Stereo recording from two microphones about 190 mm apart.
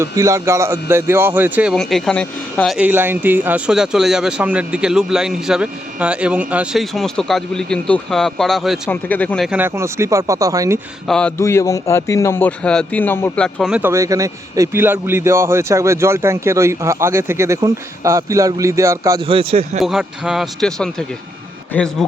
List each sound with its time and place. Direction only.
0.0 s a man's voice: 15° right (ahead or behind)
1.7 s speech: centre (ahead or behind)
2.7 s speech: 10° right (ahead or behind)
9.5 s a man's voice: 10° right (ahead or behind)
11.0 s a man's voice: 5° left (ahead or behind); by 19.2 s 15° right (ahead or behind)
19.2 s speech: 30° right (ahead or behind)
19.8 s speech: 5° right (ahead or behind)